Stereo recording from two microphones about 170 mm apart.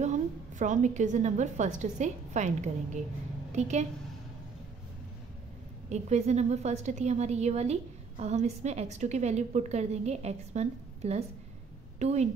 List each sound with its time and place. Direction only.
0.0 s a woman's voice: 45° right (ahead or behind)
5.9 s a woman's voice: 40° right (ahead or behind)